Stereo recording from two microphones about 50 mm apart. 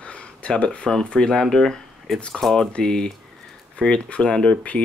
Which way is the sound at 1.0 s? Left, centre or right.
Centre.